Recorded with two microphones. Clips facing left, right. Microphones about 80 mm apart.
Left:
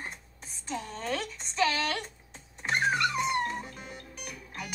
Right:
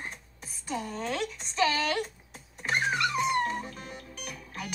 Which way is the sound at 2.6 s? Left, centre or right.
Centre.